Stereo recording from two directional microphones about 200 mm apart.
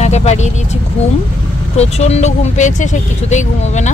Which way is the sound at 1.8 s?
30° left (ahead or behind).